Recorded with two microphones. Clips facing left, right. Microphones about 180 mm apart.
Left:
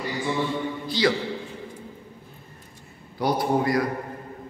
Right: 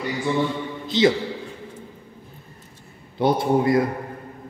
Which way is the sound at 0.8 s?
20° right (ahead or behind).